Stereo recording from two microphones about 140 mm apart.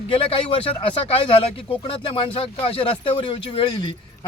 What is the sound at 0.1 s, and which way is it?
A man's voice, 40° left (ahead or behind).